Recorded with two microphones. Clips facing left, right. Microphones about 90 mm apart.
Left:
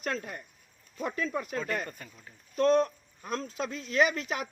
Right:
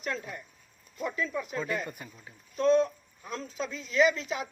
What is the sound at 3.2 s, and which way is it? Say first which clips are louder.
Speech: left 2 dB; 55° left (ahead or behind).